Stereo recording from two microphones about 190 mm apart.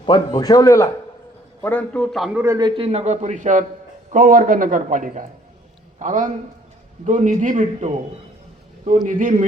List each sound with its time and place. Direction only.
0.0 s a man's voice: 25° left (ahead or behind); by 2.4 s centre (ahead or behind)
2.4 s a man's voice: 20° right (ahead or behind); by 7.9 s 40° right (ahead or behind)
9.0 s a man's voice: 45° right (ahead or behind)